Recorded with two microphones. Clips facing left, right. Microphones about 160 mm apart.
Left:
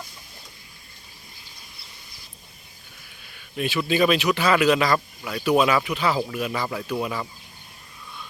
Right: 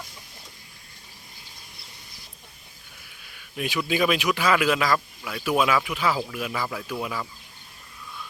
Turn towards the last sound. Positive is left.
turn(degrees=0)  # may be behind; listen again after turning